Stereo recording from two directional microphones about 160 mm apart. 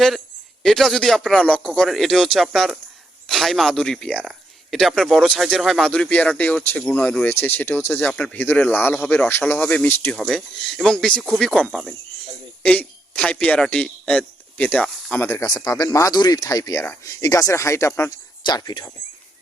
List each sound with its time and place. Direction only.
0.6 s a man's voice: centre (ahead or behind)
15.5 s speech: 25° left (ahead or behind)